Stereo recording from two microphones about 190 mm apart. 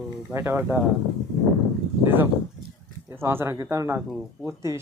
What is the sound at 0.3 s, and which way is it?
Speech, 10° right (ahead or behind).